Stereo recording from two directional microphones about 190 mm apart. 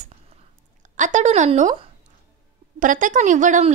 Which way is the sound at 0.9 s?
40° right (ahead or behind).